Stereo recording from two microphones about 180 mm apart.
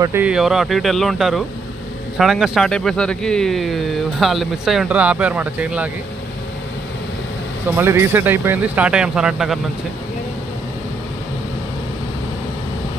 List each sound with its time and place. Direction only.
0.0 s speech: 10° right (ahead or behind)
7.7 s speech: 15° right (ahead or behind)